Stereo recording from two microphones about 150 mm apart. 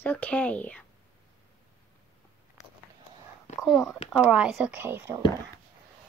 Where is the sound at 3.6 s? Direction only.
Centre (ahead or behind).